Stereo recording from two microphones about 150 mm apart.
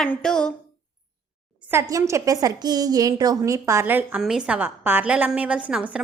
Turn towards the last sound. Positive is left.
turn(degrees=-5)  # may be behind; listen again after turning